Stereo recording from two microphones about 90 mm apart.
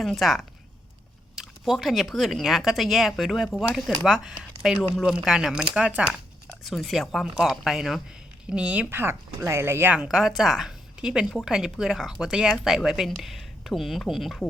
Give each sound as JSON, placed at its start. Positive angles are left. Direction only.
{"t": 0.0, "sound": "a woman's voice", "side_deg": 0}
{"t": 6.7, "sound": "a woman's voice", "side_deg": 0}
{"t": 10.0, "sound": "a woman's voice", "side_deg": -5}